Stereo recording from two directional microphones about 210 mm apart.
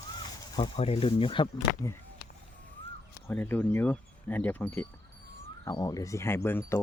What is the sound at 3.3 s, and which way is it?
Speech, 10° left (ahead or behind).